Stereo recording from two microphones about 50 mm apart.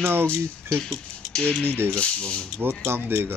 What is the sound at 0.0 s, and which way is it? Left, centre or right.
Speech, right.